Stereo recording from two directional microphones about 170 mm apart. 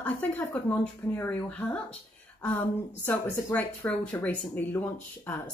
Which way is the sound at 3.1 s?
10° left (ahead or behind).